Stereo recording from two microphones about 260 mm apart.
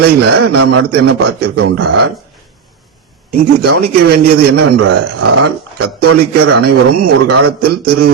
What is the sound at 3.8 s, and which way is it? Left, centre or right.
Speech, right.